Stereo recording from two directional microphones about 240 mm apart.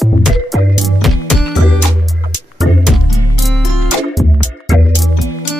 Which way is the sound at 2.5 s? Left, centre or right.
Centre.